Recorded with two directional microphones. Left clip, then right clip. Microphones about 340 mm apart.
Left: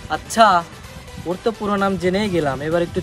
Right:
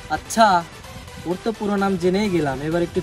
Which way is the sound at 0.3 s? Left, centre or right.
Centre.